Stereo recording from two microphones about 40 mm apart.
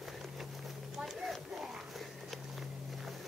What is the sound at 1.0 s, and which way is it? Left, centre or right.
Music, centre.